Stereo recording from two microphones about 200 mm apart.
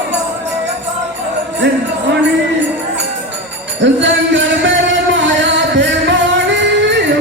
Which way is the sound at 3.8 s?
65° right (ahead or behind).